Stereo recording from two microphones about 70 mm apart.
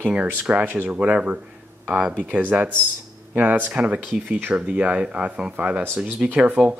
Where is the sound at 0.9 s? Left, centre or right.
Centre.